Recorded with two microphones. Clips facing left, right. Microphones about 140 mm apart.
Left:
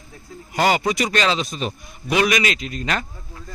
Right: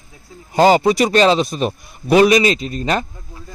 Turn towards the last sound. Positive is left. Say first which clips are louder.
# right 6 dB
turn(degrees=-30)  # may be behind; listen again after turning